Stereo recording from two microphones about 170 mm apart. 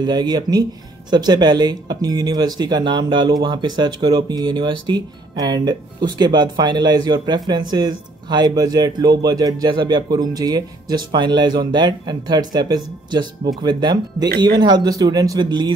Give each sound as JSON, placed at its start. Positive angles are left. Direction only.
{"t": 0.0, "sound": "speech", "side_deg": -25}